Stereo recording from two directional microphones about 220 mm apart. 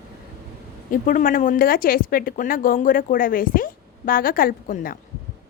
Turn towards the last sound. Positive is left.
turn(degrees=40)  # may be behind; listen again after turning